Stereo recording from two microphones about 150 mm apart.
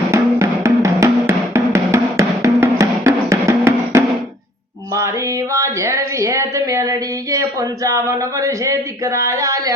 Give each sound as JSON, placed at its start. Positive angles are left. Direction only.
{"t": 0.1, "sound": "music", "side_deg": -20}
{"t": 5.5, "sound": "a sound", "side_deg": -20}
{"t": 7.9, "sound": "speech", "side_deg": -20}